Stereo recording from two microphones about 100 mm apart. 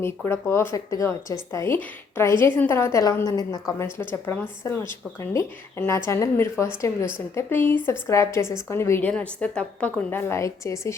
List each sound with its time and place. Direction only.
0.3 s a woman's voice: 25° left (ahead or behind)
9.0 s speech: 10° left (ahead or behind); by 10.9 s 30° left (ahead or behind)